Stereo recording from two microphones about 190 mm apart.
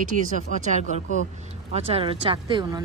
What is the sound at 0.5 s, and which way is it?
Speech, 40° right (ahead or behind).